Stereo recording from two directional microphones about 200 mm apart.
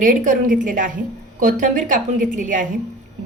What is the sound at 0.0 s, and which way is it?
A woman's voice, 40° right (ahead or behind).